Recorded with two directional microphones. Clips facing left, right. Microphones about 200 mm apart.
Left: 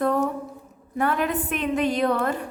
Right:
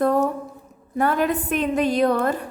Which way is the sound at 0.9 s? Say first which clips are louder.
Right 3 dB; 40° right (ahead or behind).